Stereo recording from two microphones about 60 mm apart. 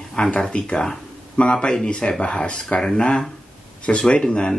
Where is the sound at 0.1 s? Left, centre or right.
Centre.